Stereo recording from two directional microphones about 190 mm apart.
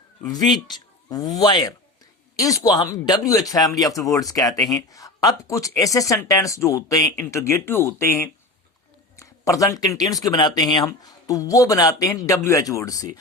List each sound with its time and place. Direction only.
0.7 s speech: 20° left (ahead or behind)